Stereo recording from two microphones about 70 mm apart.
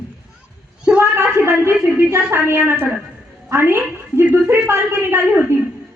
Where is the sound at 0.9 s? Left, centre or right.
Right.